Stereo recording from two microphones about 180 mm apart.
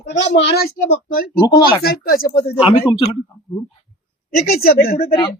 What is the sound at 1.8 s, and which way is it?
Speech, 55° left (ahead or behind).